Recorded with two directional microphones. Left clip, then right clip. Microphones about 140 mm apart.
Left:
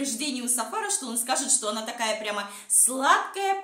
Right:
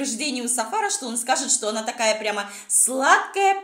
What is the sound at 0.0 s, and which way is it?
A woman's voice, 30° right (ahead or behind).